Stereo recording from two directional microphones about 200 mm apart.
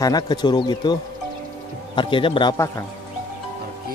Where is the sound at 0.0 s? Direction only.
20° left (ahead or behind).